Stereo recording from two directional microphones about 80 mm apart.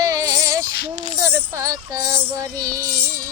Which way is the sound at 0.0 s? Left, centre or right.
Right.